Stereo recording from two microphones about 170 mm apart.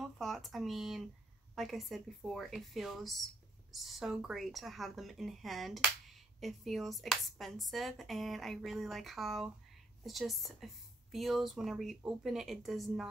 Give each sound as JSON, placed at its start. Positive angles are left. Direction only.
{"t": 0.0, "sound": "speech", "side_deg": 0}